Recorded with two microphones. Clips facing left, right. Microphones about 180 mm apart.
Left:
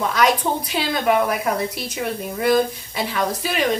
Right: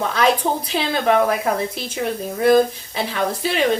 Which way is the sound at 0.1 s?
30° right (ahead or behind).